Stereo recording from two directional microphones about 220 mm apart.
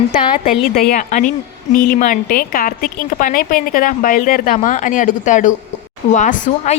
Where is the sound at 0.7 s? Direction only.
40° left (ahead or behind).